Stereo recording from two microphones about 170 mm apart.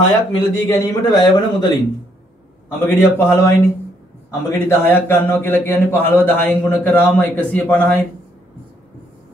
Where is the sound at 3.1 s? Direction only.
10° left (ahead or behind).